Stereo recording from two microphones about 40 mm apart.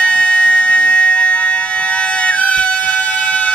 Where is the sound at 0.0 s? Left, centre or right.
Left.